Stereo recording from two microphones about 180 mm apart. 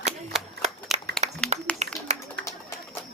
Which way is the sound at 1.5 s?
40° right (ahead or behind).